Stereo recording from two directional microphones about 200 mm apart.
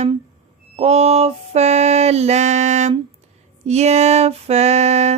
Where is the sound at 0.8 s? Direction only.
30° right (ahead or behind).